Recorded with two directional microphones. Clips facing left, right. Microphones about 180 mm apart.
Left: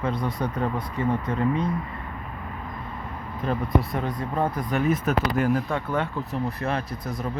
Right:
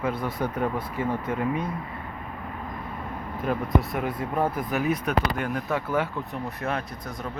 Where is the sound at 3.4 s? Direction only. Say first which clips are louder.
Even; 5° right (ahead or behind).